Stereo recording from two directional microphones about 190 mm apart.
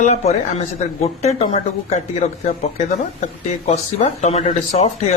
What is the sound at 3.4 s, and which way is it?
Speech, 35° left (ahead or behind).